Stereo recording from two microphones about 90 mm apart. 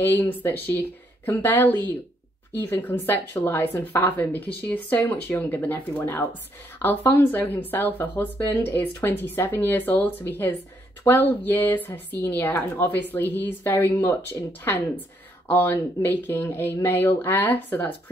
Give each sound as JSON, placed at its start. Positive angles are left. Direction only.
{"t": 0.0, "sound": "a woman's voice", "side_deg": 20}
{"t": 2.8, "sound": "a woman's voice", "side_deg": 20}
{"t": 15.4, "sound": "a woman's voice", "side_deg": 25}